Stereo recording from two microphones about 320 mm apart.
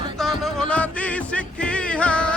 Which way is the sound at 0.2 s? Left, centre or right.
Centre.